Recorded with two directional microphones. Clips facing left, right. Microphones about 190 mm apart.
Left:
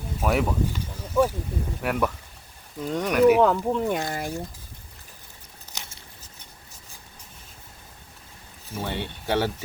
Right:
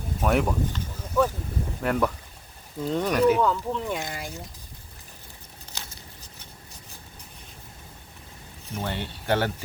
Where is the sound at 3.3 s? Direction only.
65° left (ahead or behind).